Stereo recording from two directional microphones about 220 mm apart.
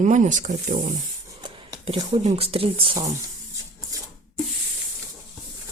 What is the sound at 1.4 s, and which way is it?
Speech, 20° right (ahead or behind).